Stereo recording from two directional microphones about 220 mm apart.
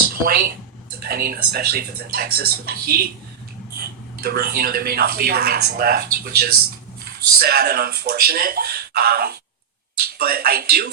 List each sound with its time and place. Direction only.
0.1 s speech: 40° right (ahead or behind)
4.2 s speech: 45° right (ahead or behind)